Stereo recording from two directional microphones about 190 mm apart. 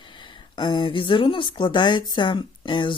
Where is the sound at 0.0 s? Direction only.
25° left (ahead or behind).